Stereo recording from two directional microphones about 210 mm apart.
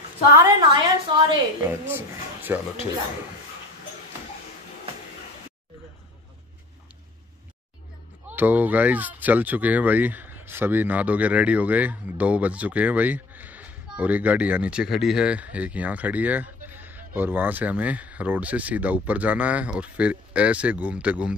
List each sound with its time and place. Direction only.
0.4 s a woman's voice: 20° right (ahead or behind)
1.9 s speech: 10° right (ahead or behind)
8.3 s speech: 10° right (ahead or behind)